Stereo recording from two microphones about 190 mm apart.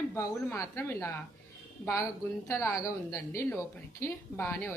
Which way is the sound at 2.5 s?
15° left (ahead or behind).